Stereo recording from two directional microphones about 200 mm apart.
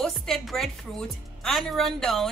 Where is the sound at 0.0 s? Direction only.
Centre (ahead or behind).